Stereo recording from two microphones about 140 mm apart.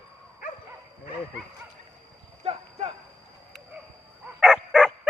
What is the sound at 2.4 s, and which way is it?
Clip-clop, 40° right (ahead or behind).